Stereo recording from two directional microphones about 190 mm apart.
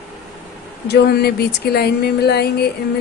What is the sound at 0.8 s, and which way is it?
A woman's voice, 60° left (ahead or behind).